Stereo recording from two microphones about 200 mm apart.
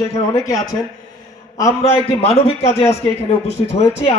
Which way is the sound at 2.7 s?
15° left (ahead or behind).